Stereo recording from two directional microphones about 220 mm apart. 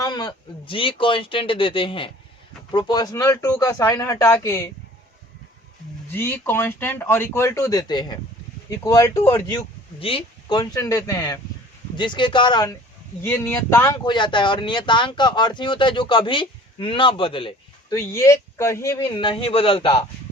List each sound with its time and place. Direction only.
0.0 s speech: 20° left (ahead or behind)
6.1 s speech: 10° left (ahead or behind)
10.0 s speech: 25° left (ahead or behind)